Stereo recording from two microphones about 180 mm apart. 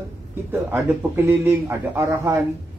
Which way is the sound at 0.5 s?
15° right (ahead or behind).